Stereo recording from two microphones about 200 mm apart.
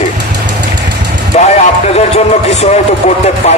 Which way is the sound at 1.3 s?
35° left (ahead or behind).